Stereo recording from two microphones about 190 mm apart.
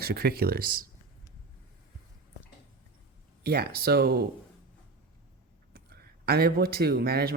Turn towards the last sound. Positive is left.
turn(degrees=-55)  # may be behind; listen again after turning